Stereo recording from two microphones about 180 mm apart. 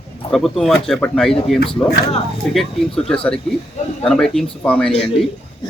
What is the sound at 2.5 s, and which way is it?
A man's voice, centre (ahead or behind).